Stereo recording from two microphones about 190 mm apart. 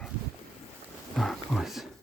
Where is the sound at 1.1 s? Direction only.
5° left (ahead or behind).